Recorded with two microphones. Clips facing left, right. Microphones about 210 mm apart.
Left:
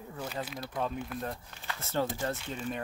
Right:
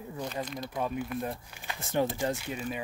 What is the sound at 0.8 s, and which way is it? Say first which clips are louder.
Speech: right 2 dB; 5° right (ahead or behind).